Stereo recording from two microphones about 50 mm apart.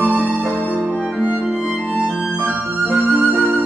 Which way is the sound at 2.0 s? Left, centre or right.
Centre.